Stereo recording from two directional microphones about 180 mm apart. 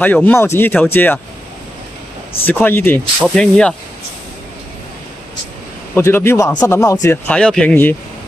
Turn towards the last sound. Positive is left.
turn(degrees=10)  # may be behind; listen again after turning